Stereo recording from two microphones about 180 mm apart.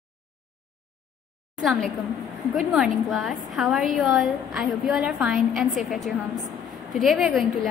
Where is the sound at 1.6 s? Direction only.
Centre (ahead or behind).